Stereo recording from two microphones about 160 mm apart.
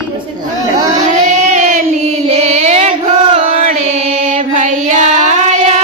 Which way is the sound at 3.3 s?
40° right (ahead or behind).